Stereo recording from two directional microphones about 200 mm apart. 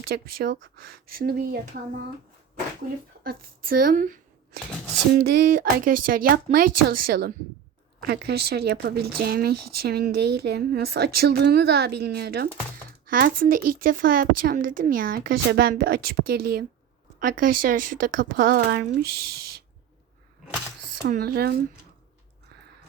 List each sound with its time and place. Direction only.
0.1 s speech: 50° right (ahead or behind)
3.2 s speech: 45° right (ahead or behind)
21.1 s speech: 50° right (ahead or behind)